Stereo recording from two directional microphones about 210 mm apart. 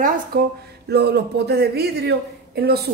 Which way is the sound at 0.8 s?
50° right (ahead or behind).